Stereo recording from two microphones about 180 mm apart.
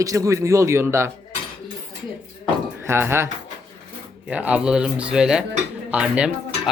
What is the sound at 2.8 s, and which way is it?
Speech, 15° right (ahead or behind).